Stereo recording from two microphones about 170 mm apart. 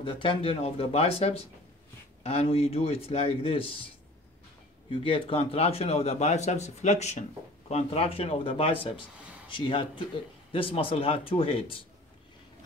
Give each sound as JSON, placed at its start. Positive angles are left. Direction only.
{"t": 0.0, "sound": "speech", "side_deg": 30}
{"t": 4.9, "sound": "a man's voice", "side_deg": 30}